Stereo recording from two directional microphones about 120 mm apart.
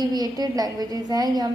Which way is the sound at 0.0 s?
35° right (ahead or behind).